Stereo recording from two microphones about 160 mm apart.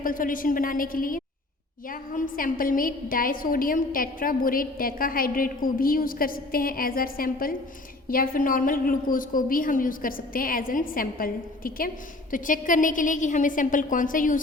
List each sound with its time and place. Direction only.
0.0 s a woman's voice: 60° left (ahead or behind)